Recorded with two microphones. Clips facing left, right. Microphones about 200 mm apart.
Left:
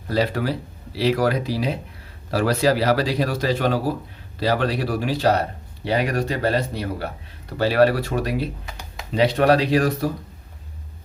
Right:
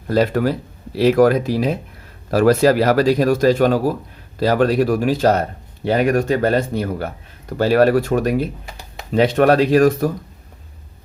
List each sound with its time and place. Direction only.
0.1 s speech: 50° right (ahead or behind)